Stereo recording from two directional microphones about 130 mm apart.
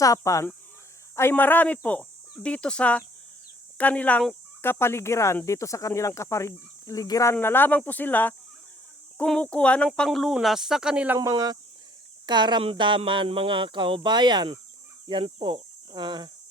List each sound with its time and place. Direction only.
0.0 s speech: 25° left (ahead or behind)
7.3 s speech: 15° left (ahead or behind); by 11.2 s 10° right (ahead or behind)
11.2 s speech: 30° right (ahead or behind)
15.0 s cricket: 40° right (ahead or behind)